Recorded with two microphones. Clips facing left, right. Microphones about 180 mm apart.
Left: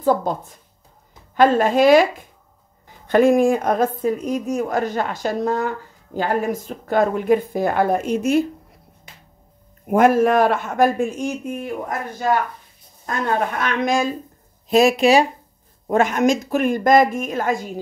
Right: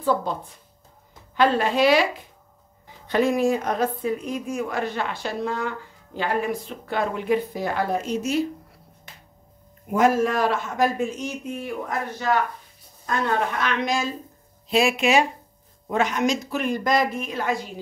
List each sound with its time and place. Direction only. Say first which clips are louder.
0.0 s a woman's voice: left 4 dB; 45° left (ahead or behind)
9.8 s a man's voice: left 5 dB; 55° left (ahead or behind)
13.0 s a woman's voice: left 2 dB; 50° left (ahead or behind)
14.7 s speech: left 6 dB; 40° left (ahead or behind)
15.9 s a woman's voice: left 5 dB; 50° left (ahead or behind)